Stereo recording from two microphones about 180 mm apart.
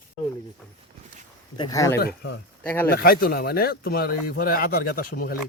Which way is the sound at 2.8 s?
55° left (ahead or behind).